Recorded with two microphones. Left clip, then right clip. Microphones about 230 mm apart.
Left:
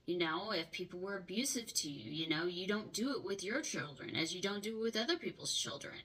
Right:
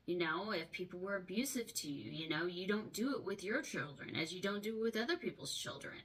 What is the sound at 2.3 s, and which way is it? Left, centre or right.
Speech, centre.